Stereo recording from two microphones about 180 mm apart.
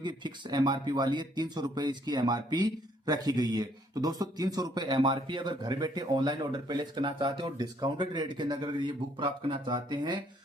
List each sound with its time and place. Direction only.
0.0 s speech: 25° right (ahead or behind)